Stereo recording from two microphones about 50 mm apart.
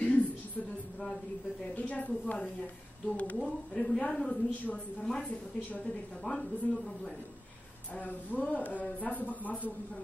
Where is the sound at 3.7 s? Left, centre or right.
Centre.